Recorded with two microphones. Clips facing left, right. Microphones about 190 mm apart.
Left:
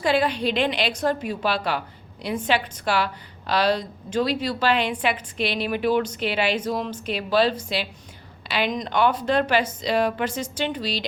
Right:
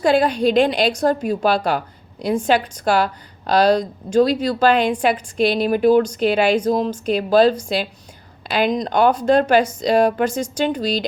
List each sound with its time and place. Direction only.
0.0 s a woman's voice: 45° right (ahead or behind)